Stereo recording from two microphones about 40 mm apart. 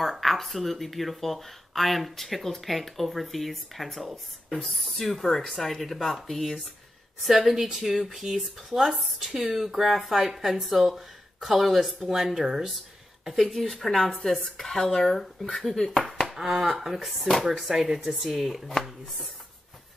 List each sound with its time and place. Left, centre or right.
0.0 s speech: centre
7.2 s speech: centre
13.2 s speech: centre
16.3 s speech: centre